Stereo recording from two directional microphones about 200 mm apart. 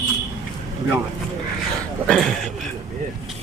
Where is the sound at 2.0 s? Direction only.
Centre (ahead or behind).